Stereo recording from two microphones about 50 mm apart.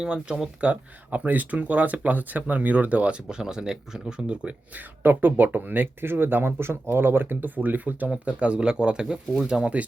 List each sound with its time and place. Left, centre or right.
0.0 s speech: centre
0.6 s speech: right
3.2 s speech: centre
4.4 s speech: right
8.2 s speech: right